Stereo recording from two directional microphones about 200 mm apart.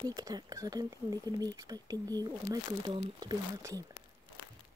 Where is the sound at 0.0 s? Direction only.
20° right (ahead or behind).